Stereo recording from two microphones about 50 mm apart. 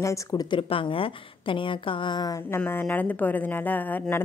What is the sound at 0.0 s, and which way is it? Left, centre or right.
Speech, left.